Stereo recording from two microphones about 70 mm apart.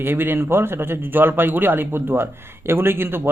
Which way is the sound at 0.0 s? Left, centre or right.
Right.